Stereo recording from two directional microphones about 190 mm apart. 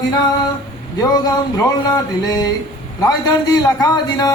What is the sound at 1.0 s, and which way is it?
A man's voice, 20° left (ahead or behind).